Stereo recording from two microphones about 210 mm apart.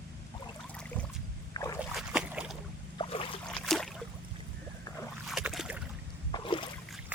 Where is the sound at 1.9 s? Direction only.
5° right (ahead or behind).